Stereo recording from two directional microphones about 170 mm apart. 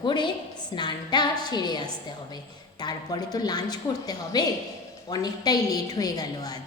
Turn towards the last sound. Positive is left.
turn(degrees=20)  # may be behind; listen again after turning